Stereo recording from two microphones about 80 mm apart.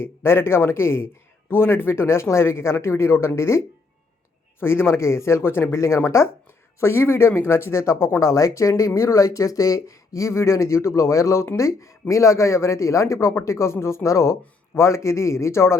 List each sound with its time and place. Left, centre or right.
0.0 s a man's voice: left
4.6 s a man's voice: left